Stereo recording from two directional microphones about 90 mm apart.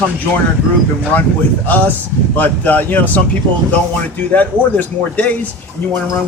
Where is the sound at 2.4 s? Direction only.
20° left (ahead or behind).